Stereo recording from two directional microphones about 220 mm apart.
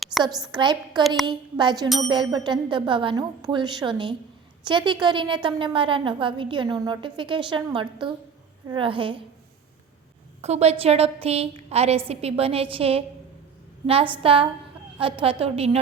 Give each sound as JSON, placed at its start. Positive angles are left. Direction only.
{"t": 0.1, "sound": "a sound", "side_deg": -5}
{"t": 0.5, "sound": "a woman's voice", "side_deg": -20}
{"t": 1.0, "sound": "a woman's voice", "side_deg": 0}
{"t": 1.3, "sound": "a woman's voice", "side_deg": -20}
{"t": 10.4, "sound": "a woman's voice", "side_deg": -30}